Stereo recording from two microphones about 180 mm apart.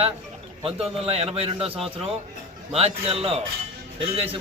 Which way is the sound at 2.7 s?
35° right (ahead or behind).